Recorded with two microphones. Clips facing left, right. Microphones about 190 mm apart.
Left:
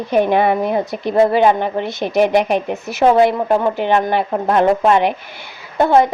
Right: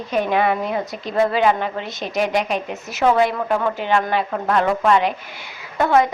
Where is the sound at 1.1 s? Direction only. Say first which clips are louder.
Left 5 dB; 25° left (ahead or behind).